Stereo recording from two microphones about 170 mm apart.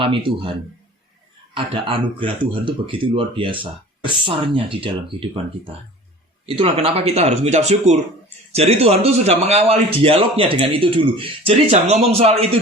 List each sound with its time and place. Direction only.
0.0 s a man's voice: 30° right (ahead or behind)
1.5 s a man's voice: 30° right (ahead or behind)
6.4 s a man's voice: 35° right (ahead or behind)